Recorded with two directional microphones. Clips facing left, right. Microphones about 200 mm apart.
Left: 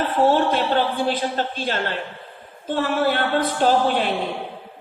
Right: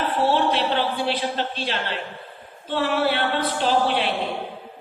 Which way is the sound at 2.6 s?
45° left (ahead or behind).